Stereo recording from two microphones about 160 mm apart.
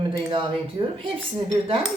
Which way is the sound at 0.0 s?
30° right (ahead or behind).